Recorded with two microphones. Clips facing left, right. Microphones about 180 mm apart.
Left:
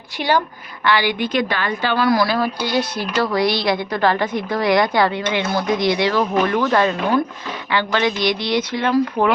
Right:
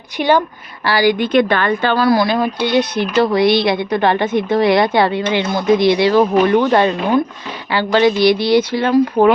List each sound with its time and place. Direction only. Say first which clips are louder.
0.2 s speech: right 5 dB; 20° right (ahead or behind)
0.9 s speech: right 4 dB; 40° right (ahead or behind)
1.2 s speech: right 7 dB; 55° right (ahead or behind)
2.0 s speech: right 2 dB; 25° right (ahead or behind)